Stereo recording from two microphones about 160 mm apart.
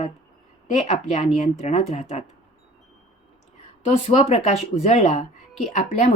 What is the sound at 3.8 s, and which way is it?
Speech, 40° left (ahead or behind).